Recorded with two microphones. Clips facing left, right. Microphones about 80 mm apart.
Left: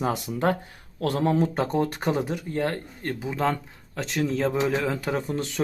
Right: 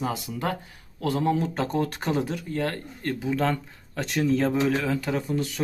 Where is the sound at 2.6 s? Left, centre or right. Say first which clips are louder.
Left 2 dB; left.